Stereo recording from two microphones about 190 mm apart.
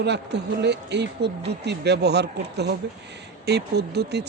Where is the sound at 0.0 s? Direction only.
65° right (ahead or behind).